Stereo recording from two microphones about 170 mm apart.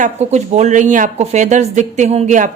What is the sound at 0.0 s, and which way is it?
Speech, 45° right (ahead or behind).